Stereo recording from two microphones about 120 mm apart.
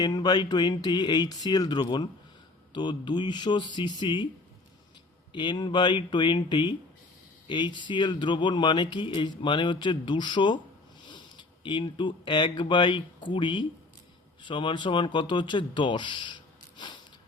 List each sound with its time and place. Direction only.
0.0 s speech: 35° left (ahead or behind)
5.3 s speech: 40° left (ahead or behind)